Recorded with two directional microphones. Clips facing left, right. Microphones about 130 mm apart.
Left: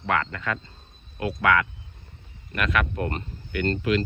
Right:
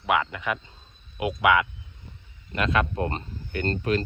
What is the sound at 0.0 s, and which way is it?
Speech, 15° right (ahead or behind).